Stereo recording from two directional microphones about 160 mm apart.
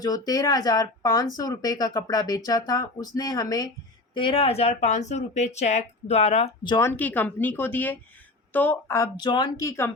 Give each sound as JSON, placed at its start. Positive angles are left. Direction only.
{"t": 0.0, "sound": "speech", "side_deg": 25}
{"t": 6.8, "sound": "speech", "side_deg": 10}